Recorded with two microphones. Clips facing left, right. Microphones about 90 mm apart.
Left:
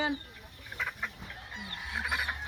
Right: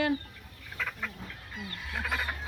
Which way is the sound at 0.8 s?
20° left (ahead or behind).